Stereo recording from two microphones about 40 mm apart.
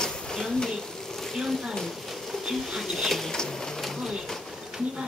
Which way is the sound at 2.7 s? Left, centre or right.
Centre.